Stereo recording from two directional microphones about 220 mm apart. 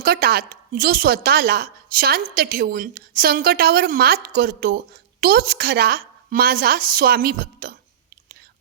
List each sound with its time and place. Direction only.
0.0 s a woman's voice: 45° right (ahead or behind)